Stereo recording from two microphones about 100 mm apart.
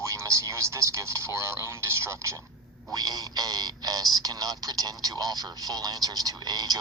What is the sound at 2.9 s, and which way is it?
Speech, 40° right (ahead or behind).